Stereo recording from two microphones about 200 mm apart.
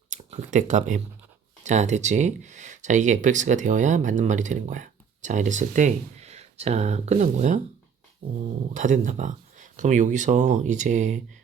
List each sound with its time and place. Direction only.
0.1 s speech: 35° right (ahead or behind)
8.7 s speech: 40° right (ahead or behind)